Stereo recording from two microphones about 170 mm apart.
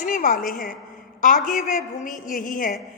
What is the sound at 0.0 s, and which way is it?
A woman's voice, 50° left (ahead or behind).